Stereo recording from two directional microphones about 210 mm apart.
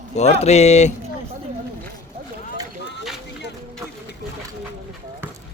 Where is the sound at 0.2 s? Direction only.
30° left (ahead or behind).